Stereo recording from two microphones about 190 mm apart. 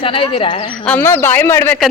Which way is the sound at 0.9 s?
10° left (ahead or behind).